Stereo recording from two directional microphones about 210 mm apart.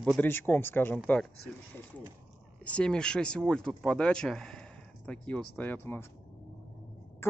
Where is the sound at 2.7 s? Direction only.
5° left (ahead or behind).